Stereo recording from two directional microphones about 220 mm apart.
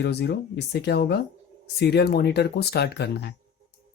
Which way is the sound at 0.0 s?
50° left (ahead or behind).